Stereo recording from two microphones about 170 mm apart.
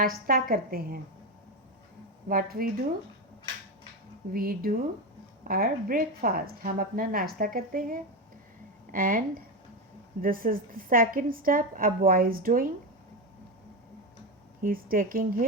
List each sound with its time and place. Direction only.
0.0 s a woman's voice: 55° right (ahead or behind)
2.3 s a woman's voice: 60° right (ahead or behind)
4.3 s a woman's voice: 60° right (ahead or behind)
14.6 s a woman's voice: 55° right (ahead or behind)